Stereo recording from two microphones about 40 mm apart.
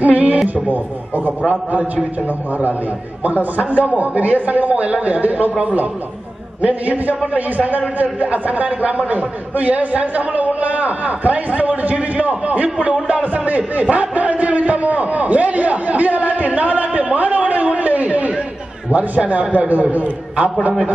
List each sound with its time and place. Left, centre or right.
0.0 s a sound: right
1.5 s a man's voice: right
3.3 s a man's voice: right